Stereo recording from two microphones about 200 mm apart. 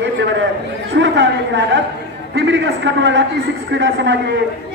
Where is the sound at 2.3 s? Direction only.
65° right (ahead or behind).